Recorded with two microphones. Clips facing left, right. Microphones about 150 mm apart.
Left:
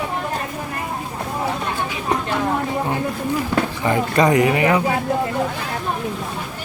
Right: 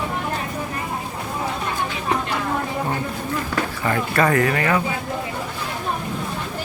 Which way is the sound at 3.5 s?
20° left (ahead or behind).